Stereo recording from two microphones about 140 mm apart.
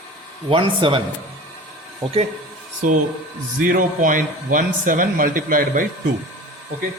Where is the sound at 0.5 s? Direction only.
40° right (ahead or behind).